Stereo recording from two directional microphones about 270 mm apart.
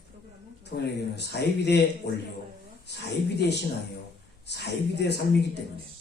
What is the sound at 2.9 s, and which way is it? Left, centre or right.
Speech, left.